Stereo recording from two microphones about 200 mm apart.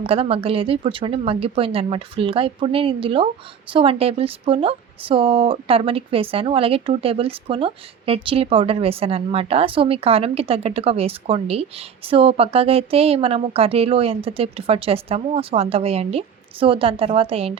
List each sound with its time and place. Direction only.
0.0 s speech: 30° right (ahead or behind)